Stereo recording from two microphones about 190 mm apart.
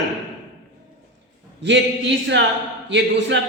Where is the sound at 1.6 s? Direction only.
70° right (ahead or behind).